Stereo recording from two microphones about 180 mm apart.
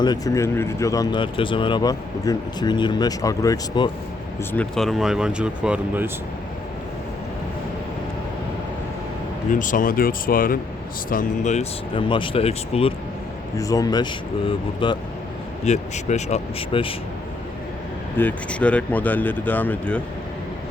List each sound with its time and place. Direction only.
0.0 s speech: 20° left (ahead or behind)
4.5 s speech: 5° left (ahead or behind)
9.5 s speech: 45° left (ahead or behind)
11.9 s speech: 25° left (ahead or behind)
13.6 s speech: 20° left (ahead or behind)
15.6 s speech: 40° left (ahead or behind)
18.2 s speech: 10° left (ahead or behind)